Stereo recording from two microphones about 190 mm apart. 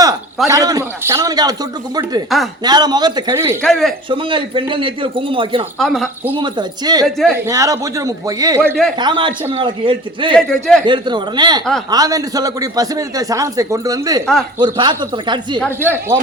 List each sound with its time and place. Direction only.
0.4 s a man's voice: 20° right (ahead or behind)
2.3 s a man's voice: centre (ahead or behind)
2.6 s speech: 20° right (ahead or behind)
3.6 s a man's voice: centre (ahead or behind)
4.1 s speech: 25° right (ahead or behind)
5.8 s a man's voice: centre (ahead or behind)
6.3 s speech: 25° right (ahead or behind)
7.0 s a man's voice: centre (ahead or behind)
7.4 s a man's voice: 15° right (ahead or behind)
10.3 s a man's voice: 5° left (ahead or behind)
10.8 s speech: 25° right (ahead or behind)
15.8 s a man's voice: 10° right (ahead or behind)